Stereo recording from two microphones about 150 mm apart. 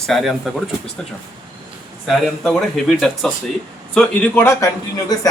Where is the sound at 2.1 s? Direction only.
Centre (ahead or behind).